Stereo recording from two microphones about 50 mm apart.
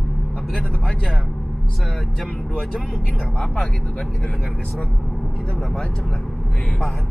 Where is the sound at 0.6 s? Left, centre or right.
Left.